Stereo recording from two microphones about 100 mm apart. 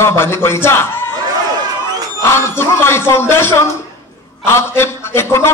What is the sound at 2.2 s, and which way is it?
A man's voice, 25° left (ahead or behind).